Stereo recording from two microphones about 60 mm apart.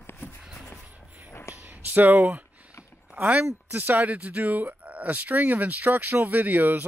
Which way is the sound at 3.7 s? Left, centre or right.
Right.